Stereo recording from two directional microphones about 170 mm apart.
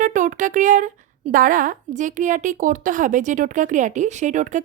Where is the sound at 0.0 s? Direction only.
50° right (ahead or behind).